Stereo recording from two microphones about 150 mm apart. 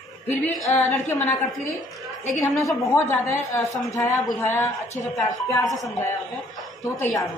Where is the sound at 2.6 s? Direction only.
20° left (ahead or behind).